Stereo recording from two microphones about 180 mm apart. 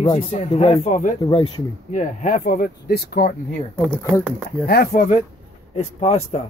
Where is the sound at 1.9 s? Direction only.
45° left (ahead or behind).